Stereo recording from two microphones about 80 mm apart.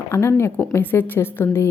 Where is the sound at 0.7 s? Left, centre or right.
Left.